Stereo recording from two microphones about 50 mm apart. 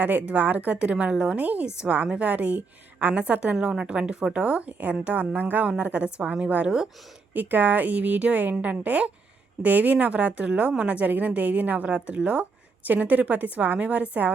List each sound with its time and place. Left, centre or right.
0.3 s a woman's voice: right
1.6 s a woman's voice: centre; by 5.6 s right
5.6 s a woman's voice: right
7.3 s a woman's voice: right